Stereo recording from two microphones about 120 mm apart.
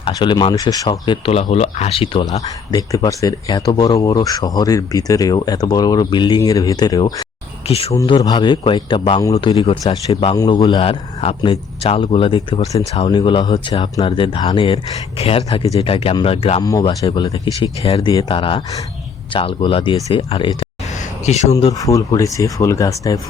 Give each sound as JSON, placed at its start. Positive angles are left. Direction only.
{"t": 0.0, "sound": "speech", "side_deg": 40}
{"t": 1.3, "sound": "speech", "side_deg": 65}
{"t": 2.7, "sound": "speech", "side_deg": 30}
{"t": 7.7, "sound": "speech", "side_deg": 60}
{"t": 8.2, "sound": "speech", "side_deg": 35}
{"t": 9.4, "sound": "speech", "side_deg": 30}
{"t": 9.8, "sound": "a man's voice", "side_deg": 45}
{"t": 10.3, "sound": "a man's voice", "side_deg": 30}
{"t": 15.2, "sound": "a man's voice", "side_deg": 60}
{"t": 16.6, "sound": "speech", "side_deg": 30}
{"t": 17.0, "sound": "a man's voice", "side_deg": 40}
{"t": 21.2, "sound": "speech", "side_deg": 65}
{"t": 21.7, "sound": "speech", "side_deg": 30}